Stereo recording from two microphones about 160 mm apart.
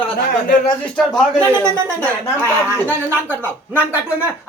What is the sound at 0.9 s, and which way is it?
A man's voice, 5° left (ahead or behind).